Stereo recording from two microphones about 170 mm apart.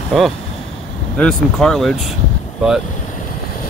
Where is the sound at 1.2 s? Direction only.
5° left (ahead or behind).